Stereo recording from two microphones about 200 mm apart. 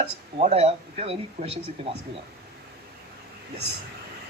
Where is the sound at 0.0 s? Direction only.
30° right (ahead or behind).